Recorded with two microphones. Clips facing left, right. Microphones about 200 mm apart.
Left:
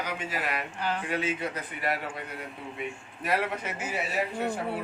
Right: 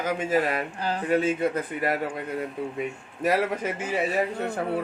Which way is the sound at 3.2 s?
40° right (ahead or behind).